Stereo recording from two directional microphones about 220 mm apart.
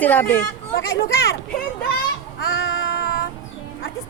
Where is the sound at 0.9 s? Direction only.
60° left (ahead or behind).